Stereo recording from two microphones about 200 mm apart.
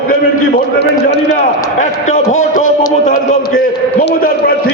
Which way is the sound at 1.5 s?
35° left (ahead or behind).